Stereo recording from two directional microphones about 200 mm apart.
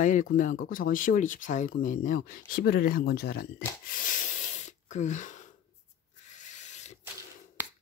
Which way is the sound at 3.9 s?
40° left (ahead or behind).